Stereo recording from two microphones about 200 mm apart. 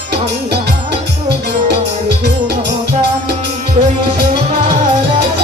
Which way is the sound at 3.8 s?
35° right (ahead or behind).